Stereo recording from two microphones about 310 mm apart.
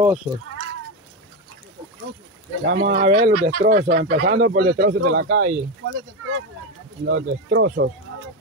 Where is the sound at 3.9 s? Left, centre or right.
Right.